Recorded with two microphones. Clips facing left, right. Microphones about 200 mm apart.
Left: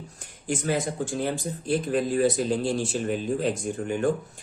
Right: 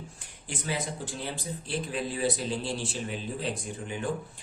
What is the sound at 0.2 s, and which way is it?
Speech, 45° left (ahead or behind).